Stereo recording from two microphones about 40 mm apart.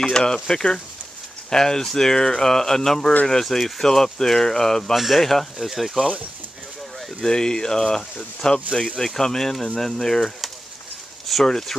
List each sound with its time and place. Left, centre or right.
0.0 s speech: centre
4.9 s speech: centre
5.6 s speech: centre
7.2 s speech: centre
9.0 s speech: centre
11.4 s speech: centre